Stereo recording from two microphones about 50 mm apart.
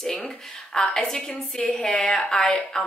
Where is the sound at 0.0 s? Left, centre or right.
Centre.